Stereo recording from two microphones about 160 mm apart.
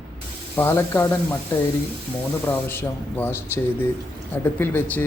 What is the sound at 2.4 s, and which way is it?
Speech, 15° left (ahead or behind).